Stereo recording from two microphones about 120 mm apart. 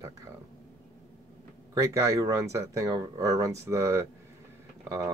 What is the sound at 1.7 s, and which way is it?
Speech, 25° right (ahead or behind).